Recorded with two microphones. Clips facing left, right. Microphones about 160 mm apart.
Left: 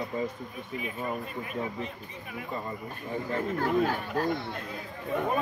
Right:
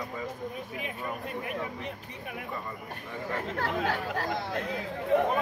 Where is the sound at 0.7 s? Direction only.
65° right (ahead or behind).